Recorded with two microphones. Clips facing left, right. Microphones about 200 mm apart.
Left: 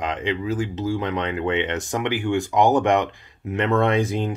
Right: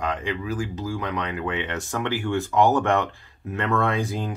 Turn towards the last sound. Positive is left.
turn(degrees=25)  # may be behind; listen again after turning